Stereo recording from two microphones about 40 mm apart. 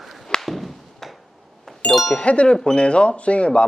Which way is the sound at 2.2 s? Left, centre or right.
Left.